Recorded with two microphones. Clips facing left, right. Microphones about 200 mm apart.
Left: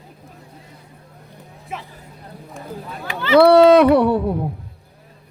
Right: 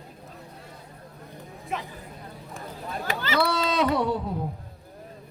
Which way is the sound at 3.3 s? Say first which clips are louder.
Left 16 dB; 60° left (ahead or behind).